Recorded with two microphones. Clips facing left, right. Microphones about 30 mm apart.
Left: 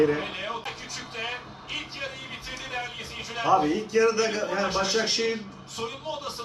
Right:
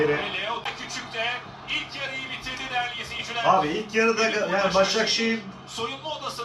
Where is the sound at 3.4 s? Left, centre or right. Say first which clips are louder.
Right 1 dB; right.